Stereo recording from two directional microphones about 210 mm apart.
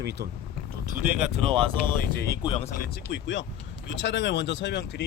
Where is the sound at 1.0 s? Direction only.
5° right (ahead or behind).